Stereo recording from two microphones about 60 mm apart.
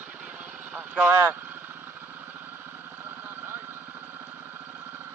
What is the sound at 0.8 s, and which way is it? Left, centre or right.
Vehicle, right.